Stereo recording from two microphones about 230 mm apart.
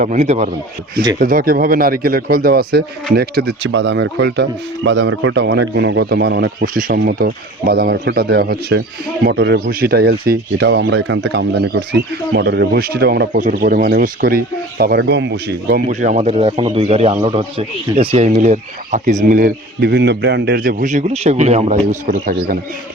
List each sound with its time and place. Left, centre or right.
0.0 s speech: right
15.9 s a man's voice: right